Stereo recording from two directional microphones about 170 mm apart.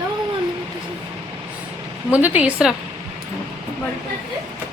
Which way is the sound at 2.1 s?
10° right (ahead or behind).